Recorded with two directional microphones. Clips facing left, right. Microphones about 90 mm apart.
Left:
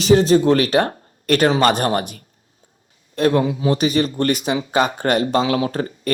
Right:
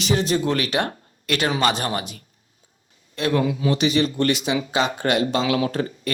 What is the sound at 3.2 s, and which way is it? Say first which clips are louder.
Speech: left 4 dB; 35° left (ahead or behind).